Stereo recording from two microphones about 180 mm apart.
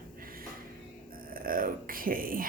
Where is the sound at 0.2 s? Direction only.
50° right (ahead or behind).